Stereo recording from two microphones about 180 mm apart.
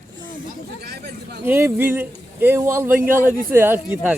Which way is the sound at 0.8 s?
65° right (ahead or behind).